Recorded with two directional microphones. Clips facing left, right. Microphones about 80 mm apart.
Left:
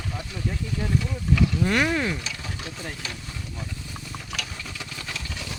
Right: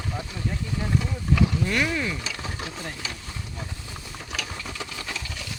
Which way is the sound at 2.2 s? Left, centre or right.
Right.